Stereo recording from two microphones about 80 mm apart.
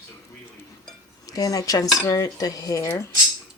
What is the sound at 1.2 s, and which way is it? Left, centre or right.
Speech, left.